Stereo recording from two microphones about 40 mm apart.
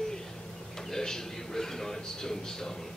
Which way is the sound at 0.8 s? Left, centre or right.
Centre.